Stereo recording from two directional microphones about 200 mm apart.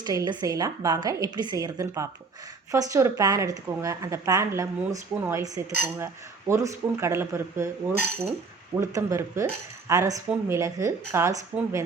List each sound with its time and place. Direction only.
0.0 s speech: 20° right (ahead or behind)
8.7 s speech: 15° right (ahead or behind)